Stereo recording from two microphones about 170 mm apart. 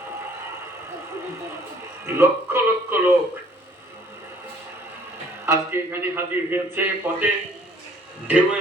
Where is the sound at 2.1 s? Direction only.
15° right (ahead or behind).